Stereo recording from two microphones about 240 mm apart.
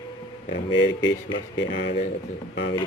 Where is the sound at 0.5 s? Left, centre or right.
Left.